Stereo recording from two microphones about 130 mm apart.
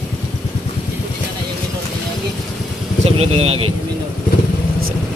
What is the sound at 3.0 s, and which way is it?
Speech, 50° right (ahead or behind).